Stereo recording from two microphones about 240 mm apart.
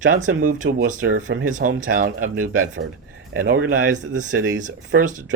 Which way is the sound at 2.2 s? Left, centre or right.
Right.